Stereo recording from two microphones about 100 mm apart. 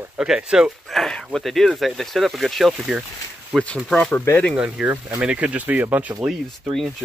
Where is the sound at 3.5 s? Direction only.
10° left (ahead or behind).